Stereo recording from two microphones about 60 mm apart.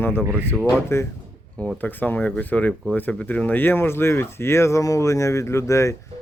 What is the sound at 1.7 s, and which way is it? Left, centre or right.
A man's voice, left.